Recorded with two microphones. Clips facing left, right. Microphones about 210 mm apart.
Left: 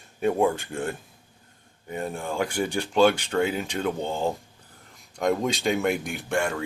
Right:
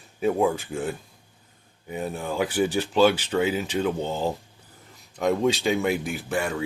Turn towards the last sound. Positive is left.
turn(degrees=-5)  # may be behind; listen again after turning